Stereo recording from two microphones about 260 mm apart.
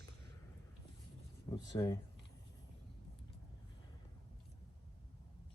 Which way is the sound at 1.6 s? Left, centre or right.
Centre.